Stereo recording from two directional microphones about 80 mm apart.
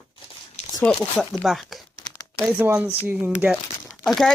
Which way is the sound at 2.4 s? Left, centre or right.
Centre.